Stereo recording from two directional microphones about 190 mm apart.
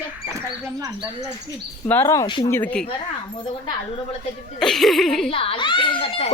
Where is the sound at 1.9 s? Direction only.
15° left (ahead or behind).